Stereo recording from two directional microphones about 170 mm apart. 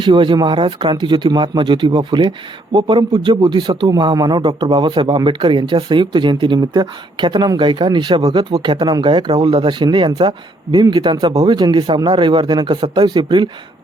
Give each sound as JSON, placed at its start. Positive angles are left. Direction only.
{"t": 0.0, "sound": "a man's voice", "side_deg": -25}